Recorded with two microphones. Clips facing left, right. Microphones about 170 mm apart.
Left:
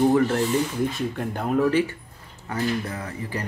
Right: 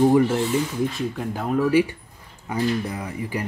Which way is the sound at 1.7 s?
10° right (ahead or behind).